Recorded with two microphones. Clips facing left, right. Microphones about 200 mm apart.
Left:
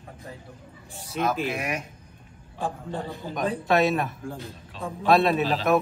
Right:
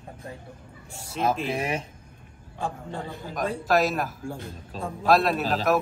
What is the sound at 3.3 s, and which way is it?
A man's voice, centre (ahead or behind).